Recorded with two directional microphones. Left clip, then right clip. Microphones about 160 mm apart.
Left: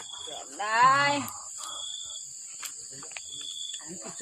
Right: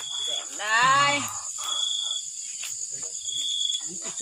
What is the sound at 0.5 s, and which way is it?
Cricket, 80° left.